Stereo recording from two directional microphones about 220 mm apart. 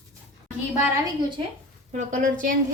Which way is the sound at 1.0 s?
20° right (ahead or behind).